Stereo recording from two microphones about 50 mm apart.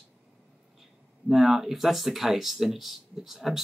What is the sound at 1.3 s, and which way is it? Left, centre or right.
Speech, centre.